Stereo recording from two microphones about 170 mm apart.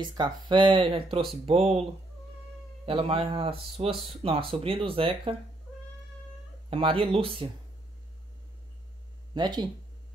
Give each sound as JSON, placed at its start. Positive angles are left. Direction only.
{"t": 0.0, "sound": "a man's voice", "side_deg": -25}
{"t": 6.7, "sound": "a man's voice", "side_deg": -30}
{"t": 9.3, "sound": "speech", "side_deg": -25}